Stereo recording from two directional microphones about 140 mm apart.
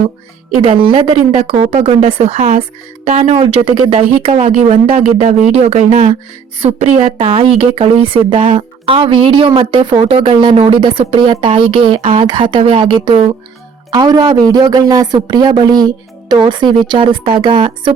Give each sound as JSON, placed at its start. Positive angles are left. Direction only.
{"t": 0.5, "sound": "a woman's voice", "side_deg": -40}